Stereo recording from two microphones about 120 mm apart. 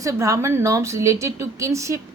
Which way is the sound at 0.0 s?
25° right (ahead or behind).